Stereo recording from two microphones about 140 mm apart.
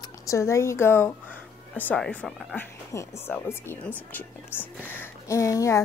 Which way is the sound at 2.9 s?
15° left (ahead or behind).